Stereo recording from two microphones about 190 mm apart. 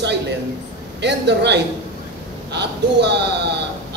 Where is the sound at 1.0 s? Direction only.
60° right (ahead or behind).